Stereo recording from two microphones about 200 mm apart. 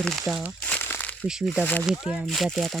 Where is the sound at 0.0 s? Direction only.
Centre (ahead or behind).